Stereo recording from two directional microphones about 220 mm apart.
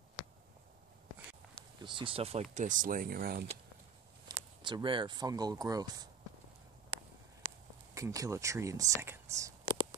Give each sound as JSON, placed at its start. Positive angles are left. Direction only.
{"t": 1.8, "sound": "speech", "side_deg": -20}
{"t": 4.6, "sound": "speech", "side_deg": -20}
{"t": 7.9, "sound": "speech", "side_deg": -15}